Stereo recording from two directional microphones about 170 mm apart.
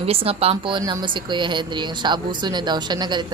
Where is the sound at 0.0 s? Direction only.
35° right (ahead or behind).